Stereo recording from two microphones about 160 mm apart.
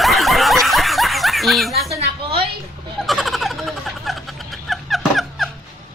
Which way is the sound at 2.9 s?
Centre (ahead or behind).